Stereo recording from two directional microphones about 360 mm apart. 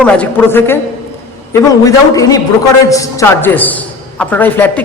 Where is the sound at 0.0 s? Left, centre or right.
Centre.